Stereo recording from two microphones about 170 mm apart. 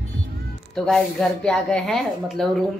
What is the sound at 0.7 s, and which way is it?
A woman's voice, 5° left (ahead or behind).